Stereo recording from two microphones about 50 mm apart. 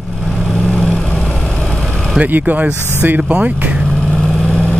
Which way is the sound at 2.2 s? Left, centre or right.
Right.